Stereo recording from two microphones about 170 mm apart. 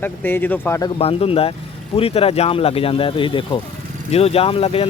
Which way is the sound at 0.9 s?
35° left (ahead or behind).